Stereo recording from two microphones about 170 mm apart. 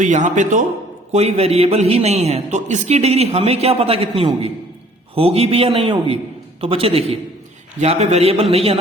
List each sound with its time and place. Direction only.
0.0 s a man's voice: 45° right (ahead or behind)